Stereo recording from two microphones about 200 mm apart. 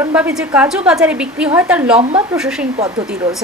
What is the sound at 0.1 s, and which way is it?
A woman's voice, 5° right (ahead or behind).